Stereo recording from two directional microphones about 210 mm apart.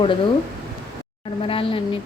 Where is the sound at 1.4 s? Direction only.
25° left (ahead or behind).